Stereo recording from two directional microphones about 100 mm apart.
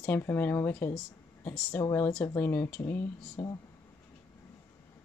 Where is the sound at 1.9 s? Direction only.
15° left (ahead or behind).